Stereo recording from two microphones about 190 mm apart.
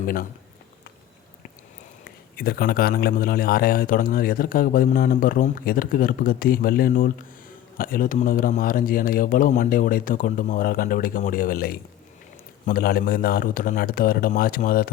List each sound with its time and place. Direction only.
0.0 s speech: 50° left (ahead or behind)
2.3 s a man's voice: 55° left (ahead or behind)